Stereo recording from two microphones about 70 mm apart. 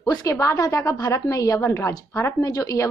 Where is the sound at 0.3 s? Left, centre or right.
Left.